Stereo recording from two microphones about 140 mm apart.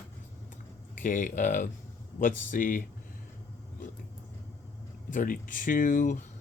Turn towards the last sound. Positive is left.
turn(degrees=70)  # may be behind; listen again after turning